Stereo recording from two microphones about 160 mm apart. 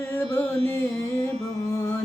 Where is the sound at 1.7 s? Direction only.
15° left (ahead or behind).